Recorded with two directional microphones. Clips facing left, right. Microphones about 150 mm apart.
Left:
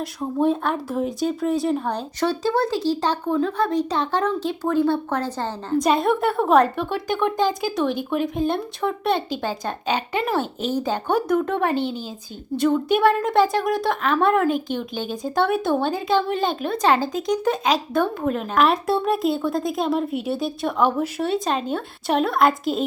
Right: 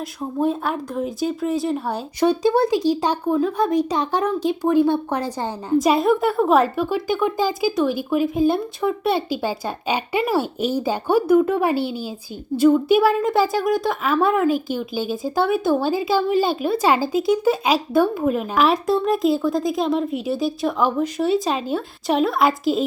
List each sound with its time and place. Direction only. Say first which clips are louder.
0.0 s a woman's voice: left 1 dB; centre (ahead or behind)
2.2 s speech: right 4 dB; 15° right (ahead or behind)
5.7 s a woman's voice: right 3 dB; 5° right (ahead or behind)